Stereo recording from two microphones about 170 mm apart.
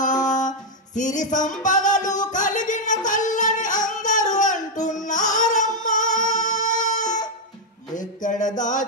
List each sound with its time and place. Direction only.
0.0 s music: 45° left (ahead or behind)